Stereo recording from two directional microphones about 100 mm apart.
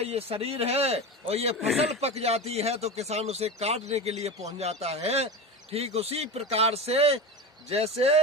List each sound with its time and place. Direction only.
0.0 s a man's voice: 85° right
1.5 s a man's voice: centre (ahead or behind)
1.8 s speech: 90° right